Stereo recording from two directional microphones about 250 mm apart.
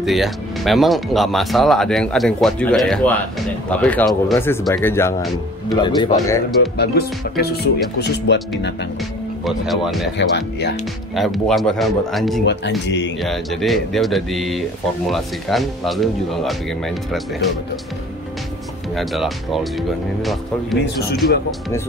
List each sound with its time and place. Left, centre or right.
0.0 s speech: centre
6.8 s speech: left
9.4 s speech: centre
10.1 s speech: left
11.1 s speech: centre
12.4 s speech: left
13.2 s speech: centre
18.9 s speech: centre